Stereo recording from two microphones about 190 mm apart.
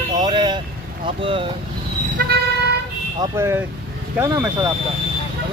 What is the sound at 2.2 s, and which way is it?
Vehicle, 50° right (ahead or behind).